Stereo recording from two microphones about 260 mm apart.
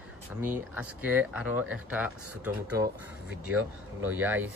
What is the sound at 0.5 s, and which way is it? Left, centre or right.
Speech, centre.